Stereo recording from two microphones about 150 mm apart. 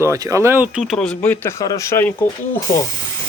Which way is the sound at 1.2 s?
15° left (ahead or behind).